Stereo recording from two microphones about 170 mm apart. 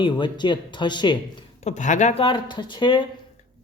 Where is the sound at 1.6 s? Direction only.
45° left (ahead or behind); by 3.1 s 30° left (ahead or behind).